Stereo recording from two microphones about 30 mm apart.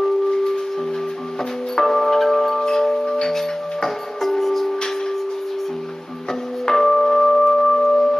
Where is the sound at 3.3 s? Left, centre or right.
Centre.